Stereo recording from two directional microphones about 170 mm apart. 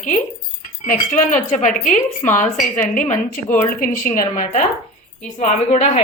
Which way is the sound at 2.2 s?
15° left (ahead or behind).